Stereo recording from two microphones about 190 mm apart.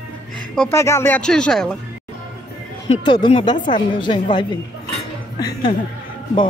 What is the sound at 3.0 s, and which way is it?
A woman's voice, 25° left (ahead or behind).